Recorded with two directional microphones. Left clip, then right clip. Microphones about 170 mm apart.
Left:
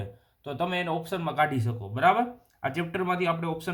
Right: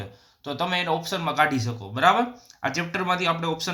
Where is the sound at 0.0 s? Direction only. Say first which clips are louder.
Right 3 dB; 20° left (ahead or behind).